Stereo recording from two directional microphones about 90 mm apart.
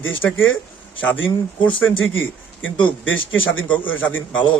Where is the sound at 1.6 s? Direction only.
15° left (ahead or behind).